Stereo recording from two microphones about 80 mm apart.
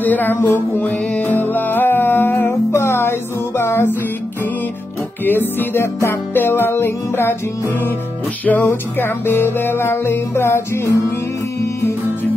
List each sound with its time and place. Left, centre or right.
0.0 s music: left
5.2 s music: left
8.5 s music: left